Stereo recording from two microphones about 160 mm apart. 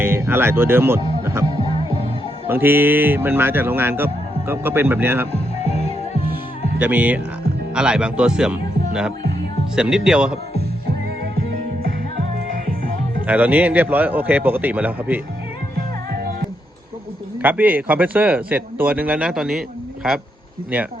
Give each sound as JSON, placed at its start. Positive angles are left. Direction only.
{"t": 0.0, "sound": "speech", "side_deg": -15}
{"t": 1.2, "sound": "music", "side_deg": -15}
{"t": 1.5, "sound": "music", "side_deg": 35}
{"t": 2.5, "sound": "speech", "side_deg": -15}
{"t": 6.7, "sound": "speech", "side_deg": -10}
{"t": 13.2, "sound": "speech", "side_deg": -10}
{"t": 17.4, "sound": "speech", "side_deg": -10}